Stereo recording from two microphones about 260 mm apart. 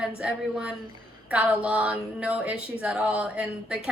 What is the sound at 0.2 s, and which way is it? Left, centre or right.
A woman's voice, centre.